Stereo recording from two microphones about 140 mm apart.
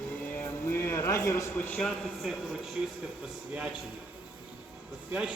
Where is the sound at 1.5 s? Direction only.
10° left (ahead or behind).